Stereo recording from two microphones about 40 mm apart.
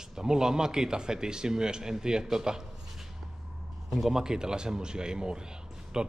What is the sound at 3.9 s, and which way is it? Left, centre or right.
A man's voice, centre.